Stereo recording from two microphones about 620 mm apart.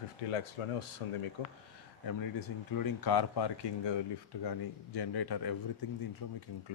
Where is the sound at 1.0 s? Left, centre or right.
Left.